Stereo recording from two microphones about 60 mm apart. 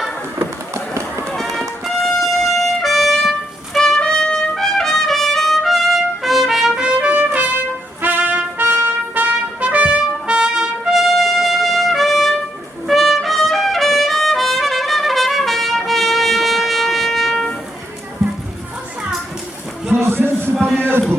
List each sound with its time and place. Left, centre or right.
0.7 s run: right
1.4 s music: centre
3.8 s trumpet: centre
8.0 s trumpet: right; by 17.5 s centre
19.9 s music: right